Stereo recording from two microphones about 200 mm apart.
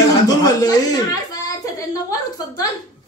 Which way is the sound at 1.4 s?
15° left (ahead or behind).